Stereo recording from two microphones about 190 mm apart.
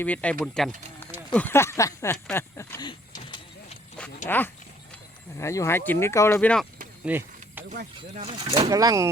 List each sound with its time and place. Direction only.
0.0 s speech: 5° left (ahead or behind)
2.2 s vehicle: 10° left (ahead or behind)
4.3 s speech: 10° left (ahead or behind)
7.0 s a sound: 10° right (ahead or behind)
8.1 s speech: 30° right (ahead or behind)